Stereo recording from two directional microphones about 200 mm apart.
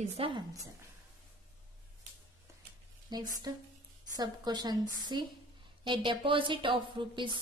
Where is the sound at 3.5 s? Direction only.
15° right (ahead or behind).